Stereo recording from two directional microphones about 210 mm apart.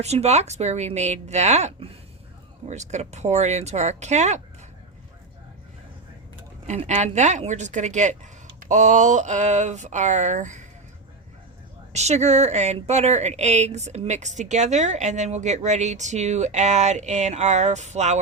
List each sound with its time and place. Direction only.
0.0 s a woman's voice: 30° right (ahead or behind)
6.7 s a woman's voice: 35° right (ahead or behind)
11.9 s a woman's voice: 30° right (ahead or behind)